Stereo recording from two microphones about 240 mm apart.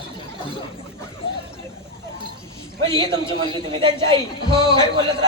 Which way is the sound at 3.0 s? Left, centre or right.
Centre.